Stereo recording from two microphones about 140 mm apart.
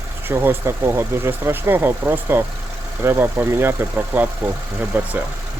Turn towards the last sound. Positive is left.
turn(degrees=-10)  # may be behind; listen again after turning